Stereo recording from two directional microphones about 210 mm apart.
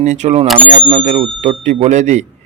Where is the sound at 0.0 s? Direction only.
35° right (ahead or behind).